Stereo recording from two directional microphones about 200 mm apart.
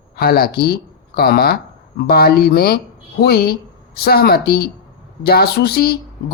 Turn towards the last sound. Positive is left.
turn(degrees=50)  # may be behind; listen again after turning